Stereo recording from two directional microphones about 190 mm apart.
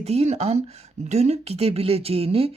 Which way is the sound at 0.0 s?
35° right (ahead or behind).